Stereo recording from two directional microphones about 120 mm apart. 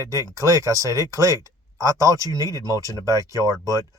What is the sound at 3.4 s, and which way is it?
Speech, 30° left (ahead or behind).